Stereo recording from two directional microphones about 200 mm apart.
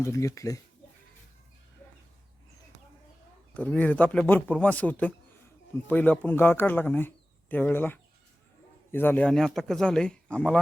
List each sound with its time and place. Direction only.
0.0 s a man's voice: 15° left (ahead or behind)
3.5 s a man's voice: 10° left (ahead or behind)